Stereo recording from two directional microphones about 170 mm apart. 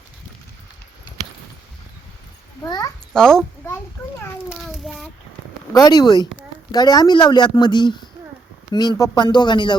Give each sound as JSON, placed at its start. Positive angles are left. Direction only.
{"t": 2.6, "sound": "speech", "side_deg": 20}
{"t": 3.2, "sound": "a child's voice", "side_deg": 0}
{"t": 4.4, "sound": "a sound", "side_deg": 0}
{"t": 5.7, "sound": "speech", "side_deg": 25}